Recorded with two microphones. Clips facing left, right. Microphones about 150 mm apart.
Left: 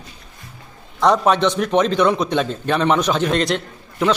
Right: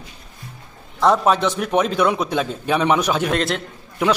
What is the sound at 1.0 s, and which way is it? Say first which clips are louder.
A man's voice: left 1 dB; 5° right (ahead or behind).